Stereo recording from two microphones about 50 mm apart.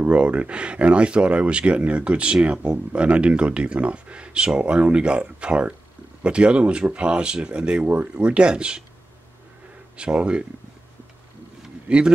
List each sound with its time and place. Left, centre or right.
0.0 s speech: right
9.9 s speech: right
11.9 s a man's voice: right